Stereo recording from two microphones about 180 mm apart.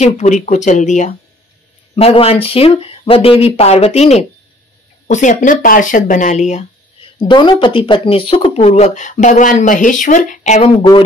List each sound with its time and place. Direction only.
0.0 s speech: 40° left (ahead or behind)
7.2 s speech: 25° left (ahead or behind); by 10.9 s 40° left (ahead or behind)